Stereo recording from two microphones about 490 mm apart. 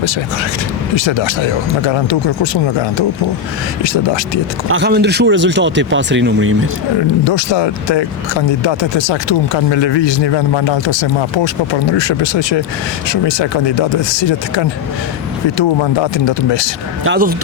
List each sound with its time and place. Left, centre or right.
0.9 s speech: left
3.8 s speech: left
4.7 s speech: centre
7.3 s speech: left
17.0 s speech: centre